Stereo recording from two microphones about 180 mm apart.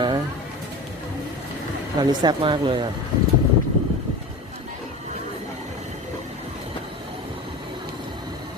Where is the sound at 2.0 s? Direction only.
25° right (ahead or behind).